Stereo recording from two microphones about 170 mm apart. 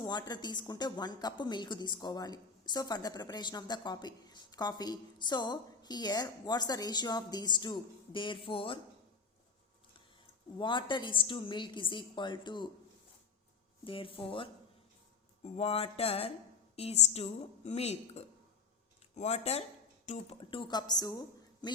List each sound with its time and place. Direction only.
0.0 s a woman's voice: 25° left (ahead or behind)
10.6 s a woman's voice: 30° left (ahead or behind)
13.8 s a woman's voice: 30° left (ahead or behind)
20.4 s a woman's voice: 30° left (ahead or behind)